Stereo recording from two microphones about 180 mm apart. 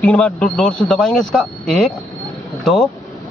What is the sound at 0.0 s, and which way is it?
Speech, 5° left (ahead or behind).